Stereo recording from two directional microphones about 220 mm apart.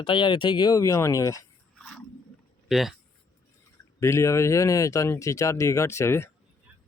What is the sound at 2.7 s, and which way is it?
Speech, centre (ahead or behind).